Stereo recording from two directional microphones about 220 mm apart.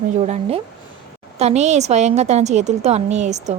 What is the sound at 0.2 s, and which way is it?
A woman's voice, 30° right (ahead or behind).